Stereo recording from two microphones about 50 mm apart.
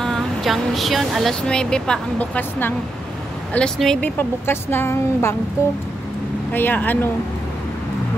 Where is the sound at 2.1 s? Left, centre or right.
Left.